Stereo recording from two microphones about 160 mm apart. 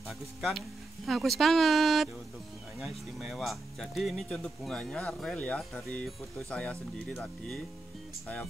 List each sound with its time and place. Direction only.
0.4 s speech: centre (ahead or behind)